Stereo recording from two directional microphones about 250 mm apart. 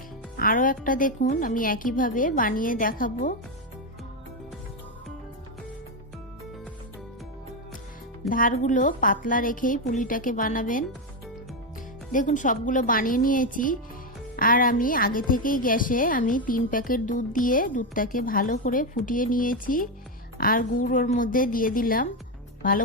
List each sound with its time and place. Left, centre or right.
0.3 s speech: left
8.3 s speech: left
12.1 s speech: left